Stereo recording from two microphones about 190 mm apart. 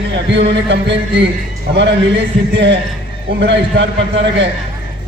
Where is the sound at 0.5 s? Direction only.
65° right (ahead or behind).